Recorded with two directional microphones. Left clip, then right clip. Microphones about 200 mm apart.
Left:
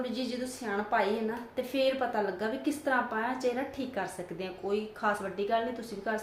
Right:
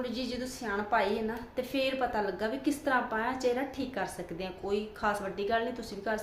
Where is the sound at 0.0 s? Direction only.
5° right (ahead or behind).